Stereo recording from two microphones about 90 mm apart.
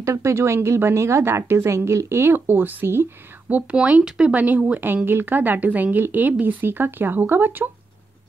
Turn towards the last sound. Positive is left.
turn(degrees=-20)  # may be behind; listen again after turning